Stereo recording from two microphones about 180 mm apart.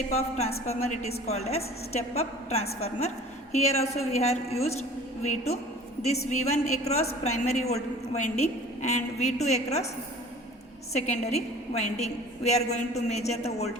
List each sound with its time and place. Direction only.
0.1 s a woman's voice: 35° left (ahead or behind)
10.9 s a woman's voice: 40° left (ahead or behind)